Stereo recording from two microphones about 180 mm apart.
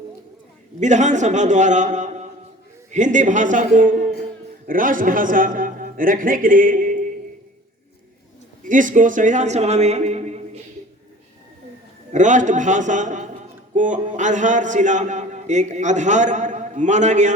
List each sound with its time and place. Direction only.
0.8 s a man's voice: 40° right (ahead or behind)
8.6 s a man's voice: 45° right (ahead or behind)
12.1 s a man's voice: 45° right (ahead or behind)